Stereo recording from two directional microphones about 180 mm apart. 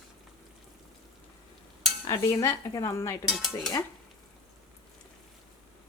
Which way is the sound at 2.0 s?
20° left (ahead or behind).